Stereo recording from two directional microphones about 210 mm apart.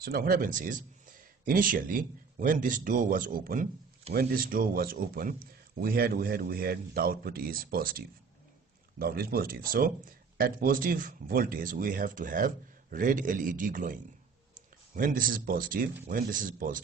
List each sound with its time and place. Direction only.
0.0 s speech: 45° right (ahead or behind)